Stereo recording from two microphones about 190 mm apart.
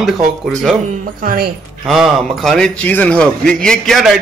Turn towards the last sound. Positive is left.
turn(degrees=0)  # may be behind; listen again after turning